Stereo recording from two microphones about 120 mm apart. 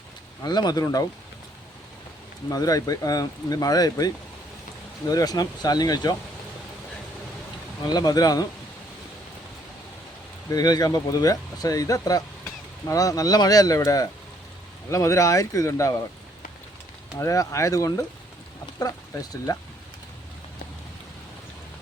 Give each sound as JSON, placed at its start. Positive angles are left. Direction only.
{"t": 0.4, "sound": "speech", "side_deg": 35}
{"t": 2.5, "sound": "speech", "side_deg": 30}
{"t": 7.9, "sound": "speech", "side_deg": 35}
{"t": 10.5, "sound": "speech", "side_deg": 35}
{"t": 17.2, "sound": "speech", "side_deg": 25}